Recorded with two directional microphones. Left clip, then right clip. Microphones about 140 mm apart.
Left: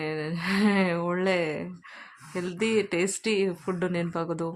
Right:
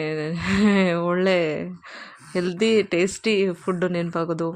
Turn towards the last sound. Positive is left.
turn(degrees=-20)  # may be behind; listen again after turning